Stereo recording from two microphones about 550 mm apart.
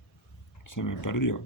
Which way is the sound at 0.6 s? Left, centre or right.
Left.